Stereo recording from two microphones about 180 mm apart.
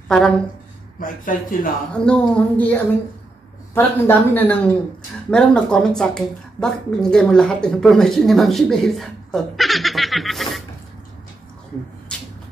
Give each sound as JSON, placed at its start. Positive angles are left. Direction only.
{"t": 0.9, "sound": "a man's voice", "side_deg": 50}
{"t": 2.0, "sound": "a woman's voice", "side_deg": 5}
{"t": 12.1, "sound": "cupboard open or close", "side_deg": 5}